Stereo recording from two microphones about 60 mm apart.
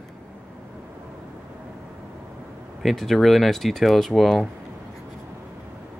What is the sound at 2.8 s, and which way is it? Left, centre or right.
Speech, centre.